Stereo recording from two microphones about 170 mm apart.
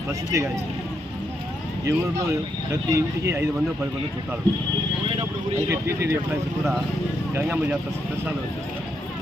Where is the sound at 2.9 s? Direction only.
15° right (ahead or behind).